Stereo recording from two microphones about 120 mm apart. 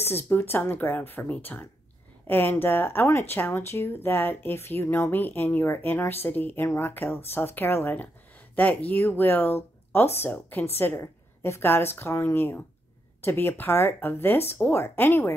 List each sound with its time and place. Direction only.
0.0 s a woman's voice: 20° left (ahead or behind)